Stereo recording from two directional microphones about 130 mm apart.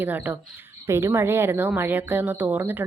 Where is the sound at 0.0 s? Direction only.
15° right (ahead or behind).